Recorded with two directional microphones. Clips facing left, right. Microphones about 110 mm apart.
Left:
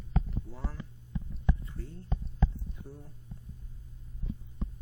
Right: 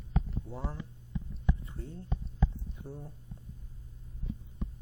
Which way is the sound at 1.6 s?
20° right (ahead or behind).